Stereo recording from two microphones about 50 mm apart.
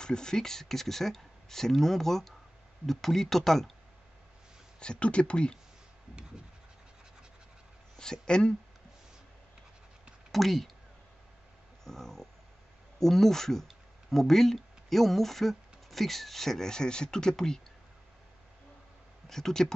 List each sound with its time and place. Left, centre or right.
0.0 s speech: centre
4.7 s speech: left
8.0 s speech: centre
10.3 s speech: centre
11.8 s speech: centre
19.2 s speech: centre